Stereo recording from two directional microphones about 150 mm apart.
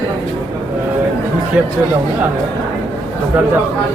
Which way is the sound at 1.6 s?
10° right (ahead or behind).